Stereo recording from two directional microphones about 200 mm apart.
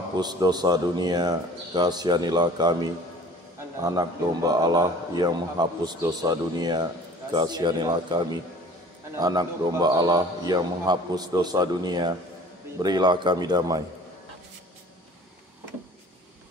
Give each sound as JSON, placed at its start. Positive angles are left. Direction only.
{"t": 0.2, "sound": "a man's voice", "side_deg": -20}